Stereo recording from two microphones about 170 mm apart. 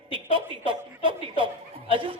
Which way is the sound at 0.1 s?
30° right (ahead or behind).